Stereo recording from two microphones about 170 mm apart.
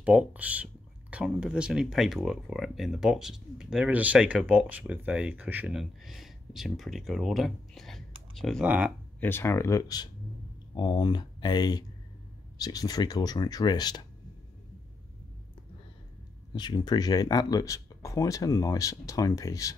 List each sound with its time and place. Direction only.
0.0 s speech: 10° right (ahead or behind)
9.2 s speech: 15° left (ahead or behind)
16.5 s speech: 25° left (ahead or behind)